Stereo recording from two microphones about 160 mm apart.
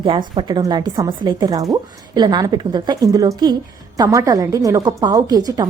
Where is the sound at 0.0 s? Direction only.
30° right (ahead or behind).